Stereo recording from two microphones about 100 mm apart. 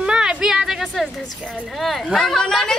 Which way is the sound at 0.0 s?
10° right (ahead or behind).